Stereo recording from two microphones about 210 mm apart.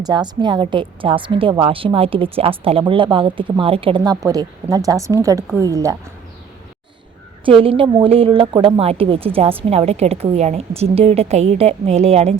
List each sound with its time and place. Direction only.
0.0 s a woman's voice: 20° right (ahead or behind)
7.4 s a woman's voice: 25° right (ahead or behind)